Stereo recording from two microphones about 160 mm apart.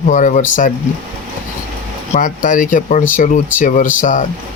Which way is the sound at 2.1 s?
55° left (ahead or behind).